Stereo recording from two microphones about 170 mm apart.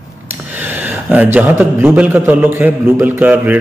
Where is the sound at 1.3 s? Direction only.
10° right (ahead or behind).